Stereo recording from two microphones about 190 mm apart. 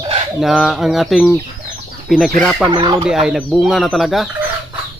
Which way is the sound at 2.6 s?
25° right (ahead or behind).